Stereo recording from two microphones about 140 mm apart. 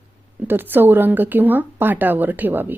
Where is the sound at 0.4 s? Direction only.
15° right (ahead or behind).